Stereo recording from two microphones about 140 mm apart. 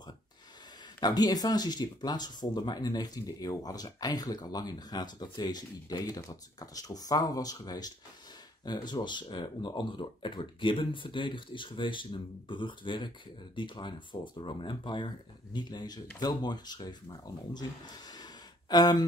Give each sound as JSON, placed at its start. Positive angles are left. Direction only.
{"t": 1.0, "sound": "speech", "side_deg": 30}